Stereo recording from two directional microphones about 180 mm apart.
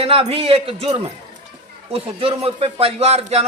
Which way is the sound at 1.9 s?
30° right (ahead or behind).